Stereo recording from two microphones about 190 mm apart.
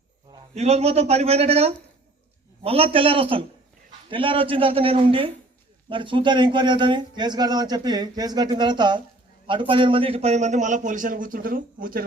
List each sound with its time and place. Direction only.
0.5 s a man's voice: 35° right (ahead or behind)